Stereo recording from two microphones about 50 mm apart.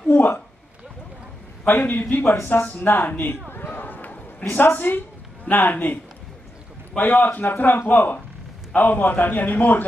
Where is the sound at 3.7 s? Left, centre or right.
Left.